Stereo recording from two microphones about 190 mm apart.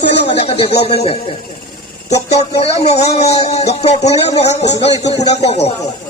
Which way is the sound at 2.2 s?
35° left (ahead or behind).